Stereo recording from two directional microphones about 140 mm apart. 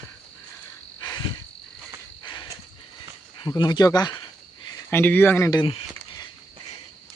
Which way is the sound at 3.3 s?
35° left (ahead or behind).